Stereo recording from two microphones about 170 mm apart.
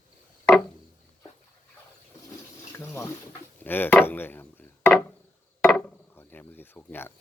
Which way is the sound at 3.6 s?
10° left (ahead or behind).